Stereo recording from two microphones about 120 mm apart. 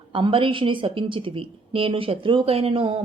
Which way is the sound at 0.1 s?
45° right (ahead or behind).